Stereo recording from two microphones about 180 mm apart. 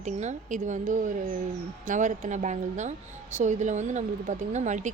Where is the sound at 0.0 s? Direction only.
40° right (ahead or behind).